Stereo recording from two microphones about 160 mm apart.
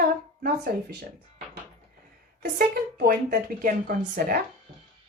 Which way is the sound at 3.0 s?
60° right (ahead or behind).